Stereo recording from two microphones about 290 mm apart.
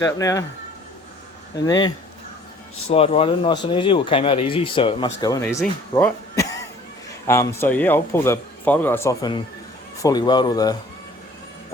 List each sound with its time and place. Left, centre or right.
0.0 s speech: centre
1.5 s speech: centre
2.9 s speech: centre